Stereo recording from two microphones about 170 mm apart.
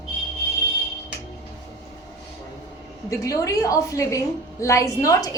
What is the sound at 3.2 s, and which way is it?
A woman's voice, 20° left (ahead or behind).